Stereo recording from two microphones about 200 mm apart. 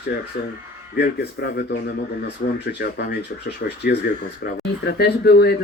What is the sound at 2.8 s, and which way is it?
Speech, 55° left (ahead or behind).